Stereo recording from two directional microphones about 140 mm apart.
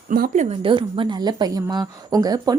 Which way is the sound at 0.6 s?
40° right (ahead or behind).